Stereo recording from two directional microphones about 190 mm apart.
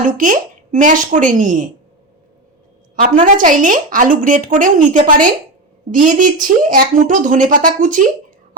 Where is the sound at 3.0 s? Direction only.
45° right (ahead or behind).